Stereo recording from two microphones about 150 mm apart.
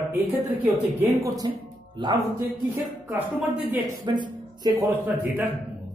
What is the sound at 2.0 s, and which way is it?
Speech, 30° right (ahead or behind).